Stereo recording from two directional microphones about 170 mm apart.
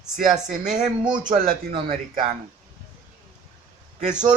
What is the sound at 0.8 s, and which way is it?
Speech, 45° right (ahead or behind).